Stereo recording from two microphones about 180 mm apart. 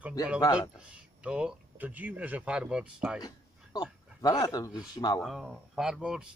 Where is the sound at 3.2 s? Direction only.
20° left (ahead or behind).